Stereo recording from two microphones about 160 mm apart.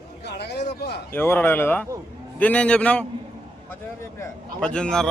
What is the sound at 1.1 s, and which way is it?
Speech, 15° left (ahead or behind).